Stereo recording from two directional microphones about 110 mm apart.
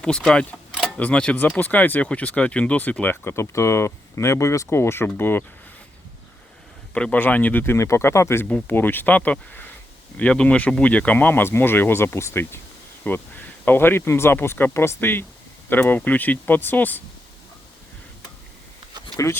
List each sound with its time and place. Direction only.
0.0 s speech: 5° left (ahead or behind)
6.9 s speech: 10° left (ahead or behind)
8.4 s speech: 15° left (ahead or behind)
19.1 s speech: 25° left (ahead or behind)